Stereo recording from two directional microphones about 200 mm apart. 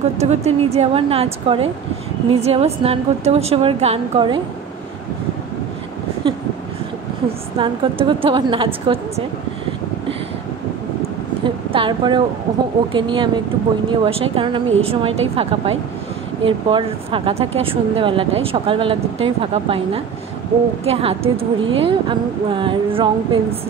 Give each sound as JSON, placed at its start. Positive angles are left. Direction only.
{"t": 0.2, "sound": "a woman's voice", "side_deg": -30}
{"t": 7.5, "sound": "speech", "side_deg": -25}
{"t": 11.7, "sound": "speech", "side_deg": -25}